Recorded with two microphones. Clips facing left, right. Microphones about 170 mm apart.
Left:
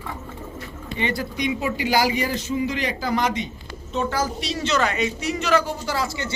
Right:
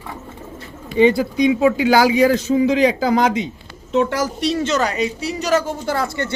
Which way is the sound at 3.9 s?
80° right.